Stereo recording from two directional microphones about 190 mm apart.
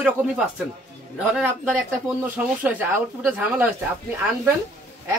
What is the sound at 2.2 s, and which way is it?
Speech, 10° right (ahead or behind).